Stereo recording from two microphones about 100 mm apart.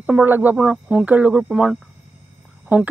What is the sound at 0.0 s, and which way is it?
Speech, 15° right (ahead or behind).